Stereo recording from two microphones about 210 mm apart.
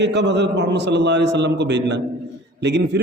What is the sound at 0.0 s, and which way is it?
A man's voice, 55° right (ahead or behind).